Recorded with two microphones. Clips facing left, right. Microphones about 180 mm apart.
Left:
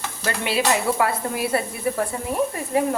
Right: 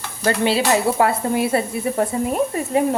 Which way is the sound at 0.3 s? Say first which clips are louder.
Right 5 dB; 30° right (ahead or behind).